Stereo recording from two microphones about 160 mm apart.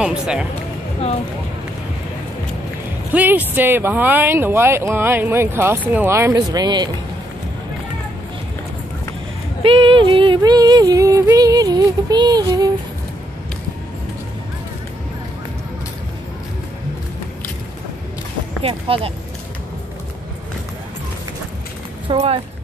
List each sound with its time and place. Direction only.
0.0 s speech: 5° right (ahead or behind)
3.1 s speech: 10° right (ahead or behind); by 6.9 s 25° right (ahead or behind)
9.6 s music: 35° right (ahead or behind)
18.6 s speech: 35° right (ahead or behind)
22.0 s speech: 40° right (ahead or behind)